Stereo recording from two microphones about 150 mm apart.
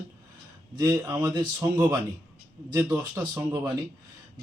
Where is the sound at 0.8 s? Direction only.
20° right (ahead or behind).